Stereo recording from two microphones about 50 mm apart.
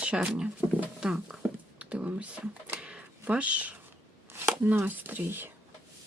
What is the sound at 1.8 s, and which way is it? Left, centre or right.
Speech, right.